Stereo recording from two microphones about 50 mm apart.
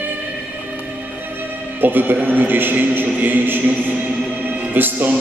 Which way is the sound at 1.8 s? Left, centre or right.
Right.